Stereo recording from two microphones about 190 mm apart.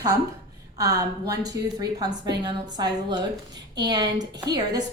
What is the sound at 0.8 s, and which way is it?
A woman's voice, 20° right (ahead or behind).